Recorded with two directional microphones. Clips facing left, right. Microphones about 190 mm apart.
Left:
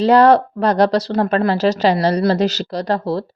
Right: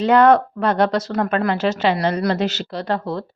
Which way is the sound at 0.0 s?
35° left (ahead or behind).